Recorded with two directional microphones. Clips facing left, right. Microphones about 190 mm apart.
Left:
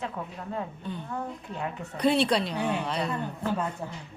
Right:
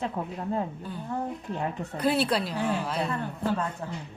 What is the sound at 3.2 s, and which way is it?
Speech, 15° left (ahead or behind).